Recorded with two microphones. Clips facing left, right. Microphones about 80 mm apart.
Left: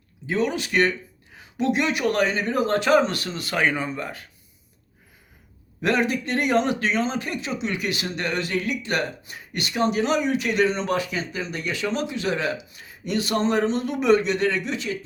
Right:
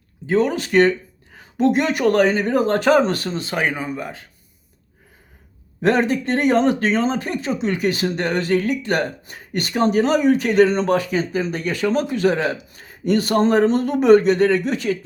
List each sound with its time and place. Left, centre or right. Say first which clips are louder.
0.3 s speech: right 6 dB; right
3.5 s speech: left 1 dB; centre
5.8 s speech: right 5 dB; right